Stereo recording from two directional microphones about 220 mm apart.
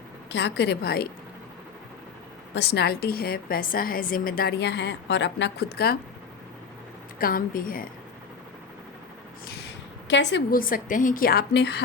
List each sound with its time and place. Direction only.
0.3 s a woman's voice: 55° left (ahead or behind)
2.6 s a woman's voice: 50° left (ahead or behind)
7.2 s a woman's voice: 40° left (ahead or behind)
9.5 s a woman's voice: 50° left (ahead or behind)